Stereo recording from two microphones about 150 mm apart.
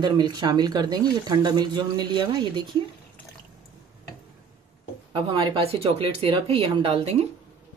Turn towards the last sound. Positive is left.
turn(degrees=-45)  # may be behind; listen again after turning